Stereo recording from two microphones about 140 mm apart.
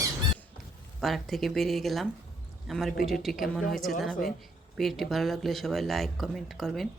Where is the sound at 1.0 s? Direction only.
Centre (ahead or behind).